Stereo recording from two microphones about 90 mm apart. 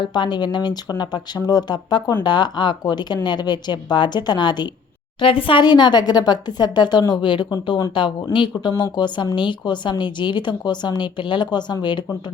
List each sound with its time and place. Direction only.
0.0 s speech: 55° left (ahead or behind)
5.2 s speech: 80° left; by 12.0 s 60° left (ahead or behind)